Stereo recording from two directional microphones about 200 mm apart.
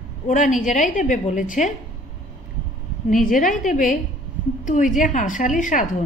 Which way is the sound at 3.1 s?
40° left (ahead or behind).